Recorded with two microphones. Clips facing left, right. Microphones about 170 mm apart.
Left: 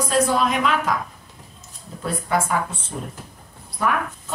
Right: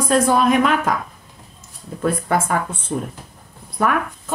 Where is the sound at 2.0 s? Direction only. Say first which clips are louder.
Right 4 dB; 50° right (ahead or behind).